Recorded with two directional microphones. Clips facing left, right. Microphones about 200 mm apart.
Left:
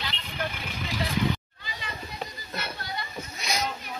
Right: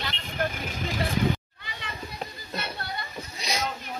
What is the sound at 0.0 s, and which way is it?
Vehicle, 50° right (ahead or behind).